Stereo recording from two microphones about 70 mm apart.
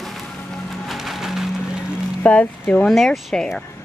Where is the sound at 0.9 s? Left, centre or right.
Centre.